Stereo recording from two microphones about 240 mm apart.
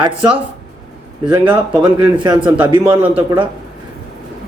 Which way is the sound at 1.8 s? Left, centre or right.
Centre.